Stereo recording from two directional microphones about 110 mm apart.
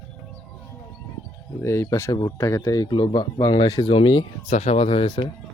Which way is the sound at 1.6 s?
25° left (ahead or behind).